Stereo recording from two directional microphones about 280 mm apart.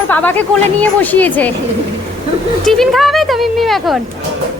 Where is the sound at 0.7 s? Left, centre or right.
Centre.